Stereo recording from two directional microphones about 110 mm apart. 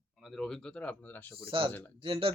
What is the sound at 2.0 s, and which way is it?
Speech, 55° right (ahead or behind).